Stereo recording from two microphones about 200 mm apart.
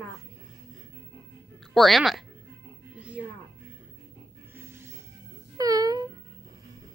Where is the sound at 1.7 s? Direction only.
Centre (ahead or behind).